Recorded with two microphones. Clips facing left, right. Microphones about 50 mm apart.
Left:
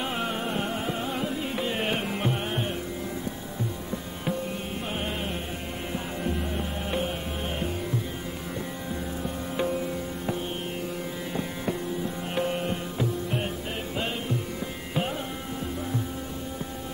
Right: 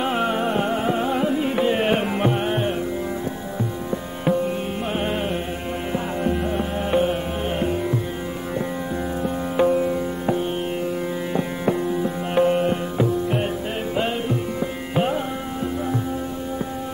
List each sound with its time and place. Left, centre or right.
0.0 s music: right
3.9 s music: right
9.2 s music: right